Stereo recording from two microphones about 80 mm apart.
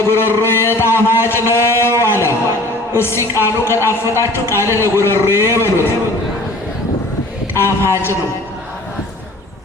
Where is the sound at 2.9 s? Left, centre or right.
Left.